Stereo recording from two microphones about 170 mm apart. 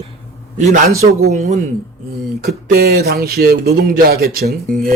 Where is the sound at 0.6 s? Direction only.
50° right (ahead or behind).